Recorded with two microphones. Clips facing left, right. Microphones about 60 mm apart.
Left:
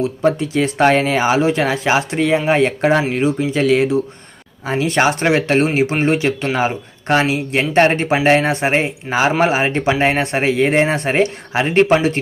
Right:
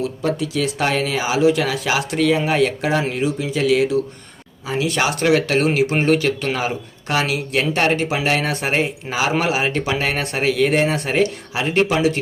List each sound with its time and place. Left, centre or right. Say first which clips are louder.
0.0 s speech: left 5 dB; left